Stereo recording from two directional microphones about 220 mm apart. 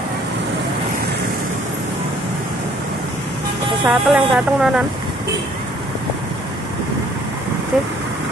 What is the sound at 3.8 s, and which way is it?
Speech, 5° right (ahead or behind).